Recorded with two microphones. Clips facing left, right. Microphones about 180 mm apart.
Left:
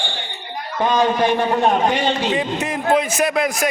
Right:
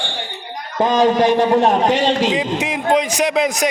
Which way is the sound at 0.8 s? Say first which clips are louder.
Right 3 dB; 40° right (ahead or behind).